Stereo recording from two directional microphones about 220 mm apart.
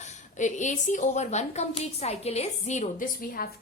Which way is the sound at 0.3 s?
35° left (ahead or behind).